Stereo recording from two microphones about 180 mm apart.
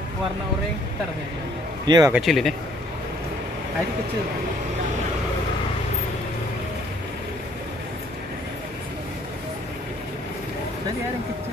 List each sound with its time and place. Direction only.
1.9 s speech: 20° right (ahead or behind)
2.1 s speech: centre (ahead or behind)